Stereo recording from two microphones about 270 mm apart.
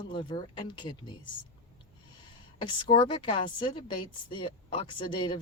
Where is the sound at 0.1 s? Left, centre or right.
Centre.